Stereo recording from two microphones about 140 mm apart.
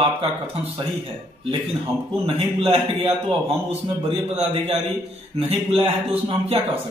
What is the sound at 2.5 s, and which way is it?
Speech, 45° right (ahead or behind).